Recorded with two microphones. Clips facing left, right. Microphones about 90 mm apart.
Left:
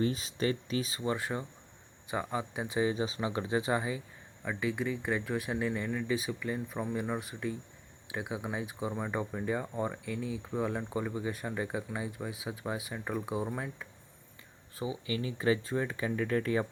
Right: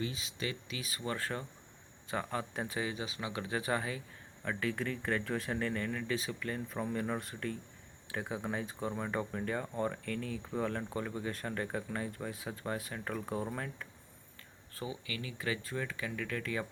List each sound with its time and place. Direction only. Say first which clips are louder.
0.0 s speech: left 8 dB; 40° left (ahead or behind); by 13.8 s 10° left (ahead or behind)
14.8 s speech: left 6 dB; 25° left (ahead or behind)